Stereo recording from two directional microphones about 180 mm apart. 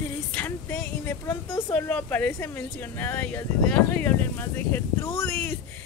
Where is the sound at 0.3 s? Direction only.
10° left (ahead or behind).